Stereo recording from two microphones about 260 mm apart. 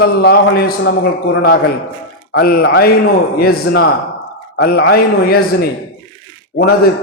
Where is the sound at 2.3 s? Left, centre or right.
Left.